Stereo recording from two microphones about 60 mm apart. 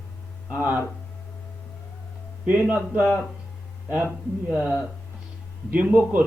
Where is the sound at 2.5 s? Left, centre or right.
Right.